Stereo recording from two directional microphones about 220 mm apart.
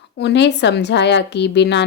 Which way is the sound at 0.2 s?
50° left (ahead or behind).